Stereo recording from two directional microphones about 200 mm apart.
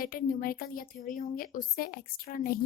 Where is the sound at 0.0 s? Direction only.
45° left (ahead or behind).